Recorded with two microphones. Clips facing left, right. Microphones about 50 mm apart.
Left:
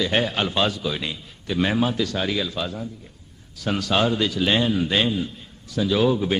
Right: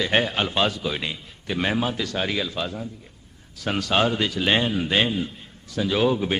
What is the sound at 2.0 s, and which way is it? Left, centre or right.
Speech, centre.